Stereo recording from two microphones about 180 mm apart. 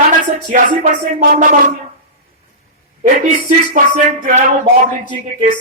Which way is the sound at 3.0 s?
50° right (ahead or behind).